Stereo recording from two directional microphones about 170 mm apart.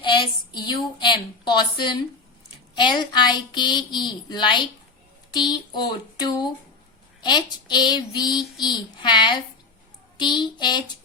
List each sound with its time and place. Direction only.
0.0 s child singing: 25° left (ahead or behind)